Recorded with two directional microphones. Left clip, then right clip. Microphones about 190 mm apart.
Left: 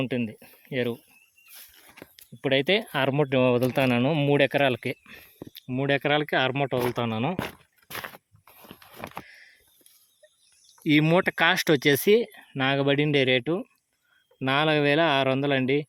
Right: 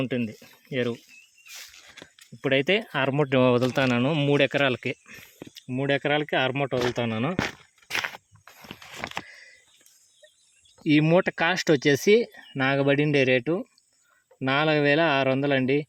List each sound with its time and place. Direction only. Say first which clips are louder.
0.0 s speech: even; centre (ahead or behind)
7.3 s speech: right 4 dB; 20° right (ahead or behind)
7.9 s a sound: right 8 dB; 15° left (ahead or behind)
8.4 s walk: right 4 dB; 20° right (ahead or behind)
9.1 s a sound: right 5 dB; 5° right (ahead or behind)
10.8 s speech: right 1 dB; 5° right (ahead or behind)